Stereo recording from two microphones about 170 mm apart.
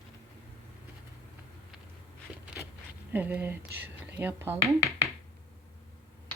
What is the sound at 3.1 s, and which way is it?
Speech, 10° right (ahead or behind).